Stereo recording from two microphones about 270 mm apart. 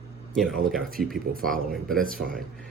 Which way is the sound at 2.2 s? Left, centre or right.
Right.